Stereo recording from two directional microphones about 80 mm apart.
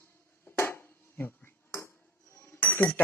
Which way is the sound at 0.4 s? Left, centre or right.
Left.